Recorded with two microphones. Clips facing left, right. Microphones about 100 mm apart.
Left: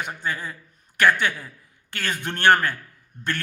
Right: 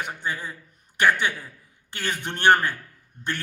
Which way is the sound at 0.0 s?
15° right (ahead or behind).